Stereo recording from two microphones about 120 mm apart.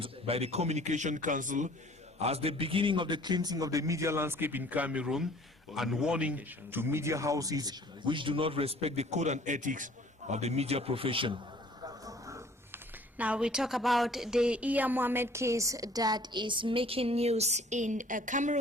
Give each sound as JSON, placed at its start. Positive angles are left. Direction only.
{"t": 0.0, "sound": "a man's voice", "side_deg": -55}
{"t": 2.1, "sound": "a woman's voice", "side_deg": -60}
{"t": 10.3, "sound": "a man's voice", "side_deg": -65}
{"t": 12.0, "sound": "a sound", "side_deg": -25}
{"t": 13.1, "sound": "a woman's voice", "side_deg": -10}